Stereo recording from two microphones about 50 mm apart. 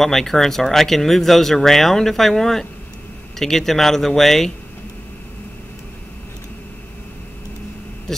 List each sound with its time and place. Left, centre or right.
0.0 s speech: centre